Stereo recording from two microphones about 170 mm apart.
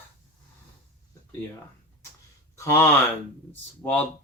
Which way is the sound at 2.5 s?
15° left (ahead or behind).